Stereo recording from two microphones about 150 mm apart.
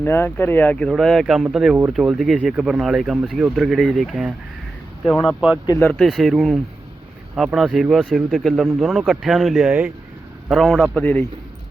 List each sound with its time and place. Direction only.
0.0 s speech: 15° left (ahead or behind); by 5.5 s 5° right (ahead or behind)
5.6 s speech: 20° left (ahead or behind)
5.9 s speech: centre (ahead or behind)